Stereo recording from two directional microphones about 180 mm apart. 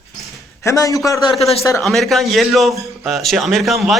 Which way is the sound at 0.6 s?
20° left (ahead or behind).